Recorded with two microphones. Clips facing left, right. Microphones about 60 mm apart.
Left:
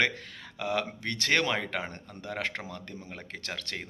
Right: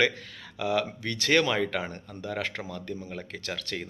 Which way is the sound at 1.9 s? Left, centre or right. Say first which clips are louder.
Right 4 dB; left.